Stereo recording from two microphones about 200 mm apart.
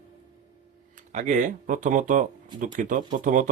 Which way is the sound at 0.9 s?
40° right (ahead or behind).